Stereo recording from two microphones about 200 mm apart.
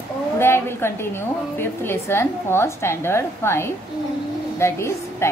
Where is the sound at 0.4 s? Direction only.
10° left (ahead or behind).